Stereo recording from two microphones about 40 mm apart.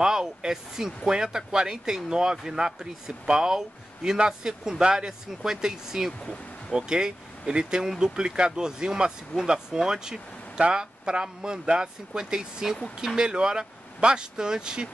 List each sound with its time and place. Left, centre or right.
0.0 s speech: centre